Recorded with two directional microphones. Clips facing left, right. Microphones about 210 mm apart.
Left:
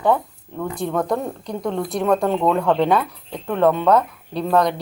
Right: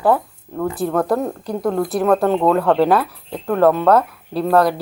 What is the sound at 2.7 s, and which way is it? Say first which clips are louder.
Speech: right 3 dB; 5° right (ahead or behind).